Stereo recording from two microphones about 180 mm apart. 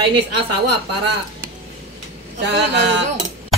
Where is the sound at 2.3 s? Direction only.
70° right (ahead or behind).